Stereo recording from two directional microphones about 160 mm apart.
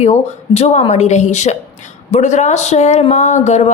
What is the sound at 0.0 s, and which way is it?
Speech, 45° left (ahead or behind).